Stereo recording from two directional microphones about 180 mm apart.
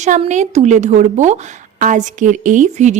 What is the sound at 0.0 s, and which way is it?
A woman's voice, 40° right (ahead or behind).